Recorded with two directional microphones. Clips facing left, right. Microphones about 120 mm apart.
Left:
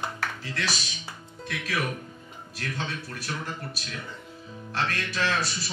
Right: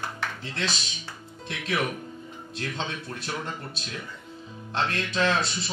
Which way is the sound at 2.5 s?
25° right (ahead or behind).